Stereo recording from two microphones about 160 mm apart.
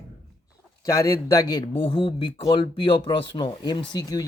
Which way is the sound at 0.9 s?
20° left (ahead or behind).